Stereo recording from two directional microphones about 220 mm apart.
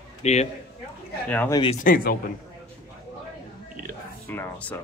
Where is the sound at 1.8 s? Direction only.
40° left (ahead or behind).